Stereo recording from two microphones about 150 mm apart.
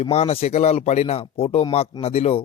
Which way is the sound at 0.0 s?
45° left (ahead or behind).